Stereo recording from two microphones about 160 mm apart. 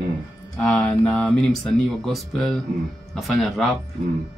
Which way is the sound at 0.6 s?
5° left (ahead or behind).